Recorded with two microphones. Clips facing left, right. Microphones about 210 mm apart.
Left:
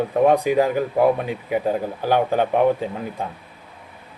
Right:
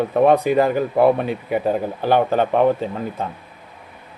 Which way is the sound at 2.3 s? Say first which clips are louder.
Right 1 dB; 15° left (ahead or behind).